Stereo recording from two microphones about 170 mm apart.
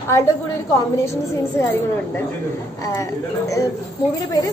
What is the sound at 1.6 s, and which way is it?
Speech, 15° left (ahead or behind).